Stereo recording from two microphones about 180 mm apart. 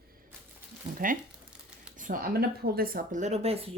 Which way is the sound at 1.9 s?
45° right (ahead or behind).